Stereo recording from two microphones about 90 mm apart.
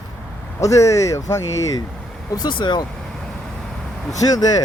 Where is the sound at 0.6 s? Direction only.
35° left (ahead or behind).